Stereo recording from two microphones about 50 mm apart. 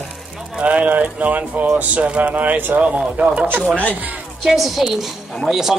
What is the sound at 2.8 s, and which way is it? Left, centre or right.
Speech, right.